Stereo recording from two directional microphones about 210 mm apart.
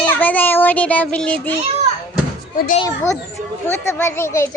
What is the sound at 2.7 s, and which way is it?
Speech, 20° left (ahead or behind).